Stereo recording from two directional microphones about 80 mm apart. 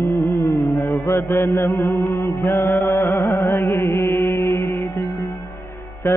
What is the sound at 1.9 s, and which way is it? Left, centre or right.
Music, left.